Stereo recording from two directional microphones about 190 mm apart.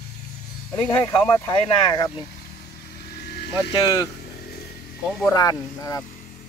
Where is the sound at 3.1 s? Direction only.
60° left (ahead or behind).